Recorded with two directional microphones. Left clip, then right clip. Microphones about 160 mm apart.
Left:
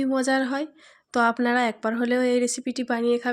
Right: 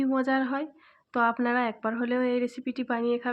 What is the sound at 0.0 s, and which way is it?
A woman's voice, 30° left (ahead or behind).